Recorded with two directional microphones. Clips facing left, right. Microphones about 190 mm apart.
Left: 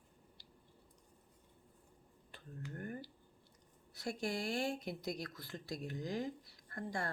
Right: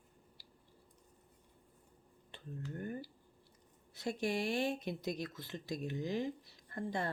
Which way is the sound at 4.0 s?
20° right (ahead or behind).